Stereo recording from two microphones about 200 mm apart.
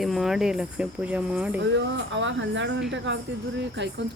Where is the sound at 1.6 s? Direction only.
65° right (ahead or behind).